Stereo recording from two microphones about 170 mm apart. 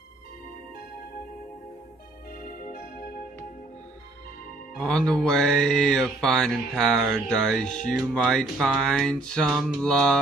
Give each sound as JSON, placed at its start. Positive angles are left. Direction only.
{"t": 2.4, "sound": "music", "side_deg": 55}
{"t": 4.7, "sound": "speech", "side_deg": 5}